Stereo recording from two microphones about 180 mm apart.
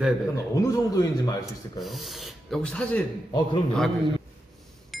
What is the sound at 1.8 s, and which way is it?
Speech, centre (ahead or behind).